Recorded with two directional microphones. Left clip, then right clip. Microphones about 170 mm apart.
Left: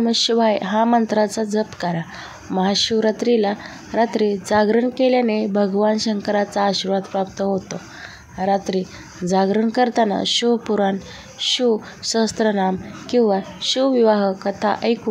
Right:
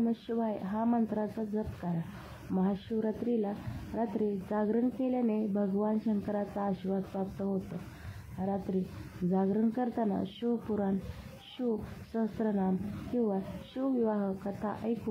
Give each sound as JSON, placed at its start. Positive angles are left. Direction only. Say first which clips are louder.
{"t": 0.0, "sound": "speech", "louder": "left 17 dB", "side_deg": 45}